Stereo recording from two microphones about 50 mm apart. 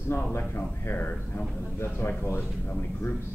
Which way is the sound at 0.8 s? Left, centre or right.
Left.